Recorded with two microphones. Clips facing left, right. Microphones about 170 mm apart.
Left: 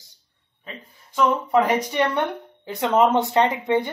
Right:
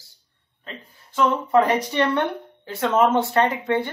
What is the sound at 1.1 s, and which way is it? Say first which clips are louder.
Speech: right 1 dB; 10° left (ahead or behind).